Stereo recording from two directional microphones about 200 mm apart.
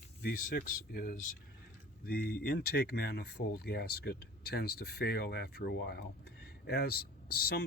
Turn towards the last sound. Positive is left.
turn(degrees=45)  # may be behind; listen again after turning